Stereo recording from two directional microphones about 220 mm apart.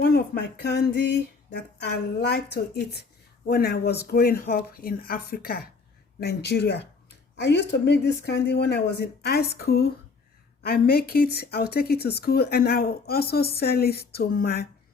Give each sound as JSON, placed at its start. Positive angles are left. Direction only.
{"t": 0.6, "sound": "speech", "side_deg": 50}